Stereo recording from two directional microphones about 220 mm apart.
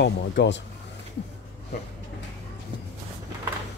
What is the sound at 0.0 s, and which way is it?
Speech, 50° left (ahead or behind).